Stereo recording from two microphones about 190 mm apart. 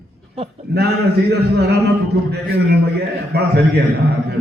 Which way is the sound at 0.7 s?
60° right (ahead or behind).